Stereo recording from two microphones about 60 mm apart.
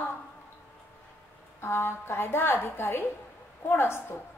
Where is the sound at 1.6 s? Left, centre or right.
Left.